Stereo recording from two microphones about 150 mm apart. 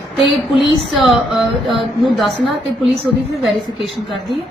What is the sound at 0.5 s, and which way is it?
Speech, 35° left (ahead or behind).